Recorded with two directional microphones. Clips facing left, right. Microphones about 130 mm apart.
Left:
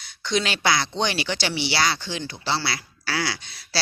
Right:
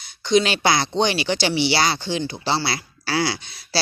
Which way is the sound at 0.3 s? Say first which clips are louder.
Right 5 dB; 20° right (ahead or behind).